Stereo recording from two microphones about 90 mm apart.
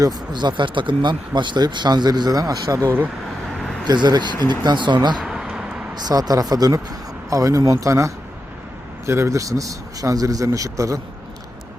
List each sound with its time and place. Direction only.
0.0 s speech: 50° right (ahead or behind); by 3.1 s 25° right (ahead or behind)
3.8 s speech: 50° right (ahead or behind)
5.2 s a sound: 5° right (ahead or behind)
5.9 s speech: 50° right (ahead or behind)